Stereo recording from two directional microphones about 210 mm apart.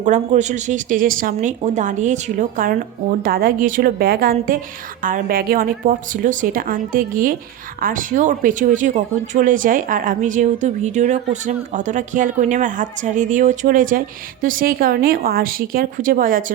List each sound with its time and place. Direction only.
0.0 s speech: 35° right (ahead or behind)